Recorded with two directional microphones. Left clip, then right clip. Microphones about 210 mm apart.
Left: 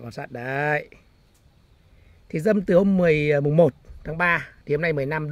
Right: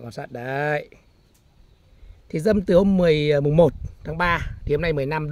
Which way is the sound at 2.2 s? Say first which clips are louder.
Right 1 dB; 10° right (ahead or behind).